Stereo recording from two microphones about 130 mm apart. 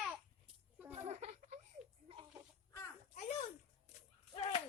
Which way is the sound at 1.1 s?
55° right (ahead or behind).